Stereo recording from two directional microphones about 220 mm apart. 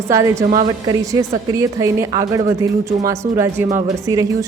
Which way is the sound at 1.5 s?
15° right (ahead or behind).